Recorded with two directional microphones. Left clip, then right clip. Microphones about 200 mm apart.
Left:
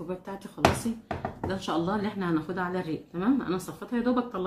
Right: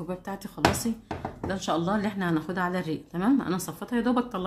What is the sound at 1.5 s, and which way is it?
A woman's voice, 35° right (ahead or behind).